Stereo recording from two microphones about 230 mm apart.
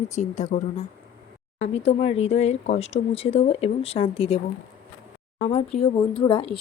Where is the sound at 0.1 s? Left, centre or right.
Left.